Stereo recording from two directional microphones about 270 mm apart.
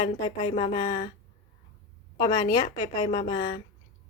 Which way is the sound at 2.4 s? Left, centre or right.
Left.